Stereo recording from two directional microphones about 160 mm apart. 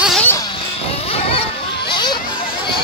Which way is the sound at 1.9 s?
25° left (ahead or behind).